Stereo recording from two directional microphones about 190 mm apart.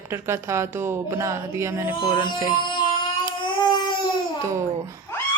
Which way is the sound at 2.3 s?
25° left (ahead or behind).